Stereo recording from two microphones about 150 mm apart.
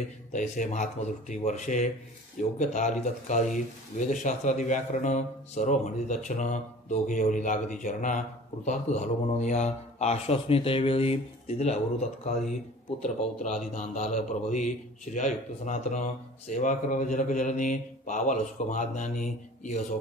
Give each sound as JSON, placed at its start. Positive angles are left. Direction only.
{"t": 0.3, "sound": "speech", "side_deg": 55}